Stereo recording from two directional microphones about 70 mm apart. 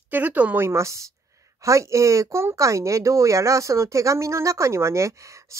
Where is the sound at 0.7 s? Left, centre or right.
Right.